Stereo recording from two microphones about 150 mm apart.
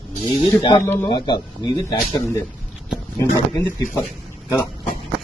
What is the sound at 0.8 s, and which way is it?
Speech, 15° left (ahead or behind).